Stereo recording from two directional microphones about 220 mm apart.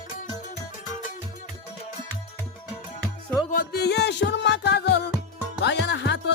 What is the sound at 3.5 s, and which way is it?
Music, 45° left (ahead or behind).